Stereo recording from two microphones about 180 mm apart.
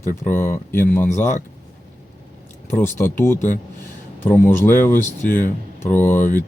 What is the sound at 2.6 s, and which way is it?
Speech, 15° left (ahead or behind).